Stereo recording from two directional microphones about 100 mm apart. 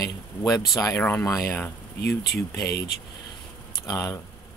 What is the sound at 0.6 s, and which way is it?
Speech, 35° left (ahead or behind).